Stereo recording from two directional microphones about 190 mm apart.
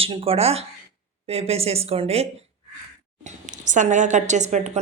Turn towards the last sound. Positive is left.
turn(degrees=-40)  # may be behind; listen again after turning